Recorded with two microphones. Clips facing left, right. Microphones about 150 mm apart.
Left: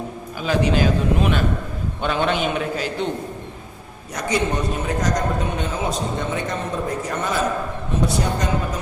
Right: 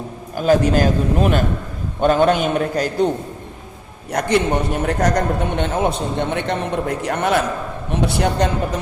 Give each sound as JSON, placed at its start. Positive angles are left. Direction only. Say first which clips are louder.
{"t": 0.3, "sound": "a man's voice", "louder": "right 5 dB", "side_deg": -45}
{"t": 4.1, "sound": "a man's voice", "louder": "right 5 dB", "side_deg": -60}